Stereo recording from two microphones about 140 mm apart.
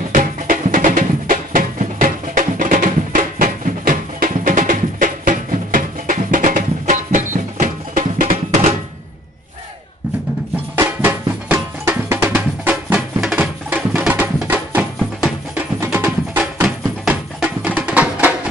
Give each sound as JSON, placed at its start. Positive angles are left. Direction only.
{"t": 0.1, "sound": "music", "side_deg": -70}
{"t": 11.0, "sound": "music", "side_deg": -15}